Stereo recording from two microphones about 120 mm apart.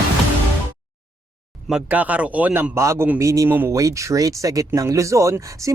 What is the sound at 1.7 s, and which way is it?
Speech, 10° right (ahead or behind).